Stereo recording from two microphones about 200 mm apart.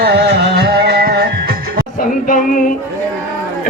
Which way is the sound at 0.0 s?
55° right (ahead or behind).